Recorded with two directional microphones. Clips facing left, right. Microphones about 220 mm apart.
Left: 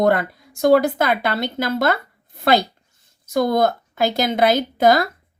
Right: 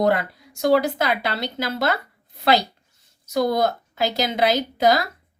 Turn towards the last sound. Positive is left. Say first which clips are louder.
# left 3 dB
turn(degrees=50)  # may be behind; listen again after turning